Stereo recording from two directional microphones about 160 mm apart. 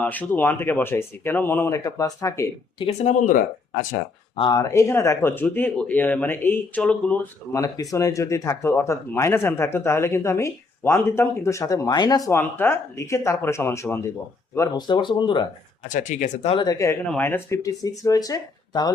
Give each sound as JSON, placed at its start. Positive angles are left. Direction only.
{"t": 0.0, "sound": "speech", "side_deg": 10}
{"t": 2.7, "sound": "speech", "side_deg": 40}
{"t": 4.4, "sound": "speech", "side_deg": 25}
{"t": 7.5, "sound": "speech", "side_deg": 20}
{"t": 15.9, "sound": "speech", "side_deg": 50}
{"t": 16.6, "sound": "speech", "side_deg": 20}